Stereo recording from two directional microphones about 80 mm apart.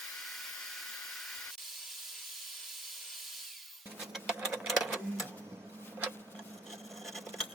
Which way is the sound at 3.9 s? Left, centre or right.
Centre.